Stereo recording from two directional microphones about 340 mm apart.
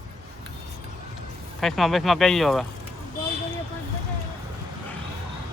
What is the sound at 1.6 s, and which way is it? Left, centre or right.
Speech, centre.